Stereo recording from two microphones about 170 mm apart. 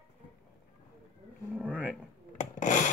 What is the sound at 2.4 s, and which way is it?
Rub, 45° left (ahead or behind).